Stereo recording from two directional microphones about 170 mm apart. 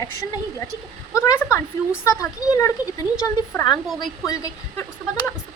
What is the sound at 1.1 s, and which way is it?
A woman's voice, 15° left (ahead or behind).